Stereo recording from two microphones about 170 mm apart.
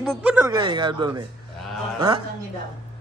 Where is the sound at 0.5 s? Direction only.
25° right (ahead or behind).